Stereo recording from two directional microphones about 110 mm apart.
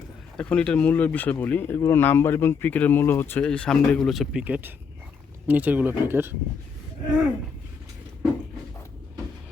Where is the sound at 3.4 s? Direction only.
5° left (ahead or behind).